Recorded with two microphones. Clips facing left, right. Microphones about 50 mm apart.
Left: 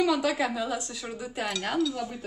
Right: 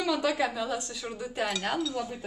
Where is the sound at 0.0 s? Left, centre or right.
Centre.